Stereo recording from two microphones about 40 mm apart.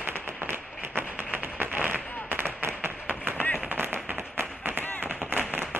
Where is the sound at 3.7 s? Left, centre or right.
Right.